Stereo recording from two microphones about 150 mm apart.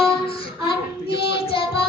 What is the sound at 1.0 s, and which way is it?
Child singing, 35° left (ahead or behind).